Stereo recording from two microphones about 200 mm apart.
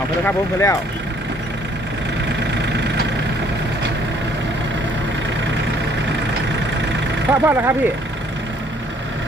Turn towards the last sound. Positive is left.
turn(degrees=-10)  # may be behind; listen again after turning